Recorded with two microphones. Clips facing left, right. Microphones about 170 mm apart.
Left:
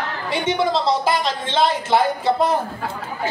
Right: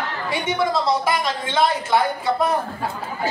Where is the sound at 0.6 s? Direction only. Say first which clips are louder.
Even; 25° left (ahead or behind).